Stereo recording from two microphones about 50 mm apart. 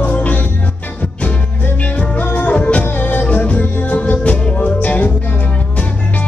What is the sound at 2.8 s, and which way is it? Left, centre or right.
Music, left.